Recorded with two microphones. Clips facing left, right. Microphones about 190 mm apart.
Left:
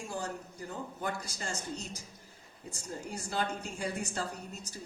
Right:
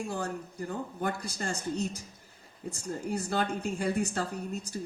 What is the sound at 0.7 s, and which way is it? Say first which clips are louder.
Speech: right 4 dB; 55° right (ahead or behind).